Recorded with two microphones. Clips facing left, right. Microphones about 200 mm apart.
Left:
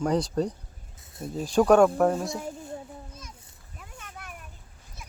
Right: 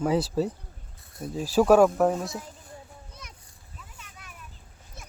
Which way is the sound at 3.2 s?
65° right (ahead or behind).